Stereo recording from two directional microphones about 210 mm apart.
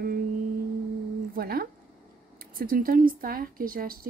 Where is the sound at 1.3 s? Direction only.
45° right (ahead or behind).